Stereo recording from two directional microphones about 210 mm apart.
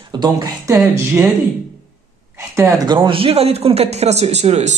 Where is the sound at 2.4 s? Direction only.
15° right (ahead or behind).